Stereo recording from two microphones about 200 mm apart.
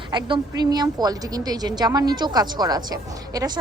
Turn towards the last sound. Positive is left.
turn(degrees=-20)  # may be behind; listen again after turning